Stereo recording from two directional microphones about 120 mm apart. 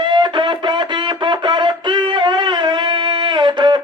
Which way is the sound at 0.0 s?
40° right (ahead or behind).